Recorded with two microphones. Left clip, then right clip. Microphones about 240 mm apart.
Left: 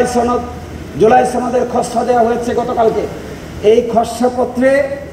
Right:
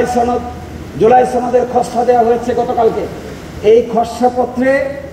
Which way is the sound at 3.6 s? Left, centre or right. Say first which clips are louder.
Right 1 dB; left.